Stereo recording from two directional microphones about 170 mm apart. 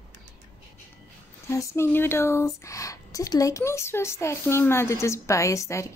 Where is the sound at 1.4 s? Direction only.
15° left (ahead or behind).